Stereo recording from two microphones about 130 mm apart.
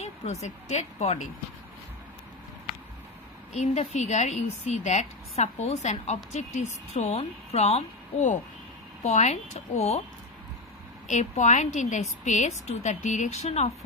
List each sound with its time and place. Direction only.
0.0 s speech: 60° left (ahead or behind)
3.5 s speech: 65° left (ahead or behind)
11.1 s speech: 65° left (ahead or behind)